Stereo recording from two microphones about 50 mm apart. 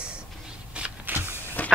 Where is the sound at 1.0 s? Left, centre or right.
Right.